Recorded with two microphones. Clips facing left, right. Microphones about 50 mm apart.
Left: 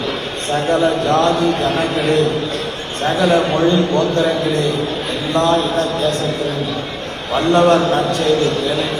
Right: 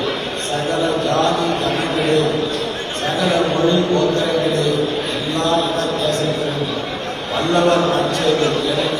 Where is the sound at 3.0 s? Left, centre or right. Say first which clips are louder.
Left 3 dB; left.